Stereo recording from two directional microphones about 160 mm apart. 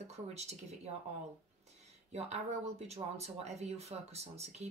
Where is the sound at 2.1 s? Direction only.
45° right (ahead or behind).